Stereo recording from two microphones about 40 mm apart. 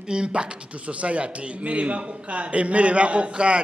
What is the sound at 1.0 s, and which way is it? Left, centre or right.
A man's voice, right.